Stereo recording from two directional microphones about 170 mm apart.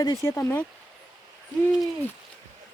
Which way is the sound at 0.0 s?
20° left (ahead or behind).